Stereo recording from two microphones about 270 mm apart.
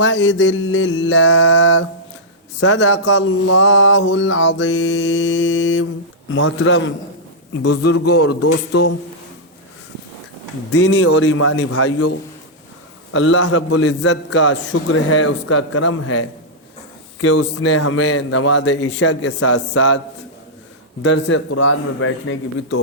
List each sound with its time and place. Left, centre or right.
0.0 s mantra: left
7.6 s a man's voice: left
10.7 s mantra: left
13.1 s mantra: left
13.4 s mantra: left
14.3 s a man's voice: left
14.7 s mantra: left
21.0 s mantra: left